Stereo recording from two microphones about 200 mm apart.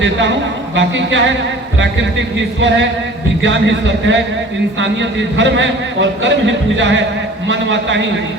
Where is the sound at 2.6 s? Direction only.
65° right (ahead or behind).